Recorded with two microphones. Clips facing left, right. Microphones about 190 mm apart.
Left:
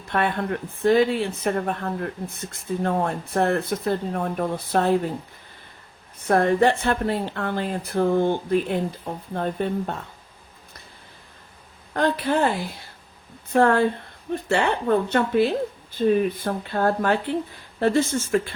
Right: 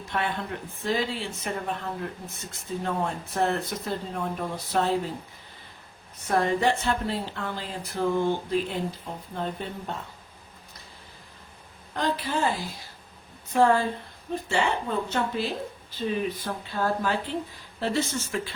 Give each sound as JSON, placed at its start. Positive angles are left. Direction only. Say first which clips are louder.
{"t": 0.1, "sound": "speech", "louder": "left 6 dB", "side_deg": 60}
{"t": 6.1, "sound": "speech", "louder": "left 6 dB", "side_deg": 55}
{"t": 11.9, "sound": "speech", "louder": "left 6 dB", "side_deg": 60}